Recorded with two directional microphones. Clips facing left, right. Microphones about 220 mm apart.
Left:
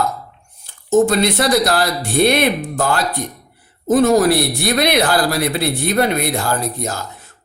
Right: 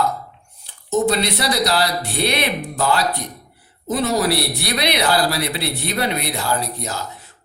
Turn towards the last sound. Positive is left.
turn(degrees=50)  # may be behind; listen again after turning